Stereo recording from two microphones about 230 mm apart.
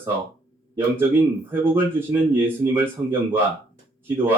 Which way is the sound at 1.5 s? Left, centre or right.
Centre.